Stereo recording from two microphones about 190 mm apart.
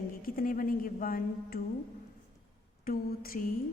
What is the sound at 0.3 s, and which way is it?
Speech, 45° left (ahead or behind).